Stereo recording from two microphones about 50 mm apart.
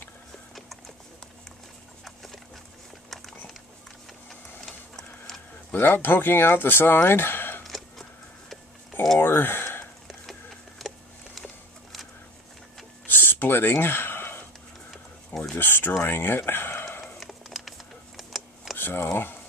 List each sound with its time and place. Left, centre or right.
0.6 s horse: centre
2.0 s dog: centre
4.3 s printer: centre
5.7 s speech: left
7.6 s music: centre
9.2 s speech: left
10.8 s a sound: centre
13.0 s a sound: left
14.9 s a sound: centre
15.5 s speech: left
17.2 s a sound: centre
18.8 s speech: left